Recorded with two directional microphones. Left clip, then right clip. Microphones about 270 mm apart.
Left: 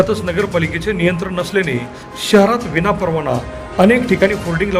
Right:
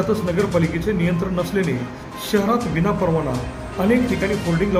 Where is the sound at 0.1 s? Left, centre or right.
Left.